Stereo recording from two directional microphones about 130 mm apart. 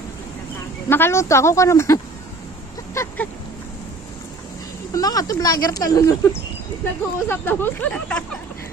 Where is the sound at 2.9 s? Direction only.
20° left (ahead or behind).